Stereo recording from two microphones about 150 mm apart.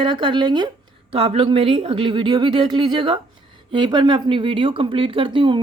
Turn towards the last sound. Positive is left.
turn(degrees=-35)  # may be behind; listen again after turning